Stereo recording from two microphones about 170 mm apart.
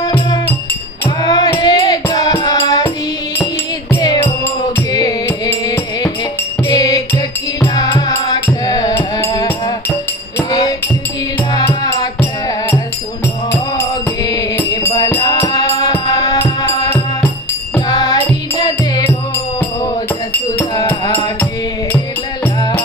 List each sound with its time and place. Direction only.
0.0 s music: 20° left (ahead or behind)
3.9 s music: 20° left (ahead or behind)
12.0 s music: 15° left (ahead or behind)